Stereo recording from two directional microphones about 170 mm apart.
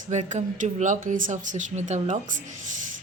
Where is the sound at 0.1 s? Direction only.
45° right (ahead or behind).